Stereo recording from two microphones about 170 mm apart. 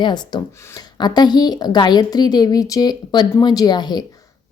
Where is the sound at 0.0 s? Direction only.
25° left (ahead or behind).